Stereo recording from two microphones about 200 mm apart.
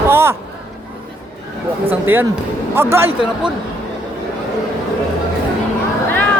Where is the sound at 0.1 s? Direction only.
10° right (ahead or behind).